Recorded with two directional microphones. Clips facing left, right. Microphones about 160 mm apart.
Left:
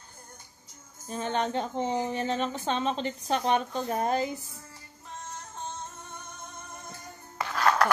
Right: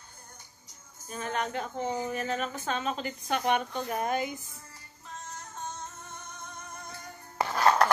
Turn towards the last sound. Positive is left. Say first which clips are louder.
# right 1 dB
turn(degrees=-25)  # may be behind; listen again after turning